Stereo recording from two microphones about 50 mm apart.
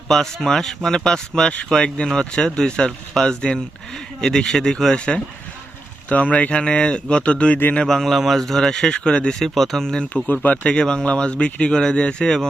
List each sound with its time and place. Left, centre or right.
0.1 s speech: centre; by 7.6 s left
7.8 s speech: centre
9.4 s speech: centre
10.2 s speech: left
10.6 s speech: centre